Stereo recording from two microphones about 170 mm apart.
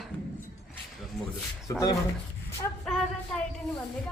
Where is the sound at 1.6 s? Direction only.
20° left (ahead or behind).